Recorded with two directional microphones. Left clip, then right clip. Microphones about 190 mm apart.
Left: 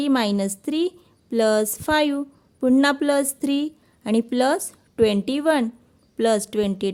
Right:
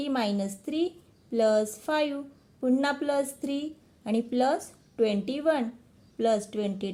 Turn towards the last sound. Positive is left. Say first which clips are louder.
# left 9 dB
turn(degrees=40)  # may be behind; listen again after turning